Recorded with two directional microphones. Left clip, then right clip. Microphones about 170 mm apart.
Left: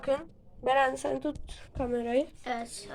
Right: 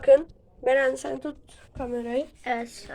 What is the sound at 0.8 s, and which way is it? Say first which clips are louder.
A woman's voice: right 2 dB; 10° left (ahead or behind).